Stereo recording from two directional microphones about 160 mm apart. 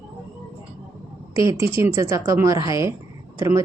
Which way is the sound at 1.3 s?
20° right (ahead or behind).